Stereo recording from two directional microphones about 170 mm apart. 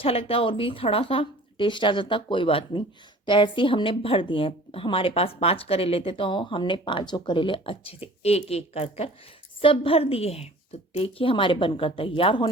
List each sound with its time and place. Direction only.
0.0 s speech: 35° left (ahead or behind)